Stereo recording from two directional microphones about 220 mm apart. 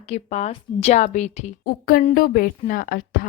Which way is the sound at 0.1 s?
30° left (ahead or behind).